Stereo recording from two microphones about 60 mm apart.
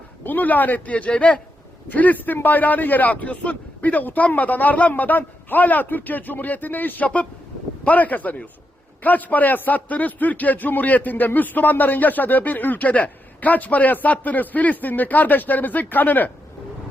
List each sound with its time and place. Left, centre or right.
0.3 s a man's voice: left